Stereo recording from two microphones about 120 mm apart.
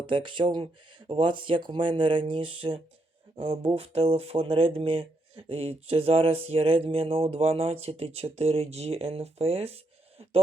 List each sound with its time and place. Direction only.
0.1 s speech: 45° right (ahead or behind)